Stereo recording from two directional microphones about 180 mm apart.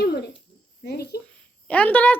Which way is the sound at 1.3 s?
10° left (ahead or behind).